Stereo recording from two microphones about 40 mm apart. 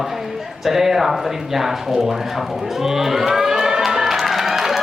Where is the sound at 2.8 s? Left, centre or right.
Centre.